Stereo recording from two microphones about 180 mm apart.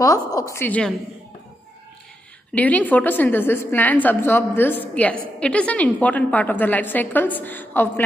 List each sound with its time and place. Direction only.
0.0 s a woman's voice: 20° left (ahead or behind)
2.5 s a woman's voice: 10° left (ahead or behind)